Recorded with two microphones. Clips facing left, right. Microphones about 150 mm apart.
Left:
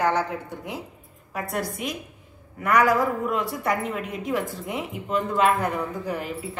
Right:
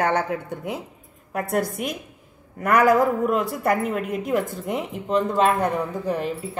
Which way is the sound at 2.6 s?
50° right (ahead or behind).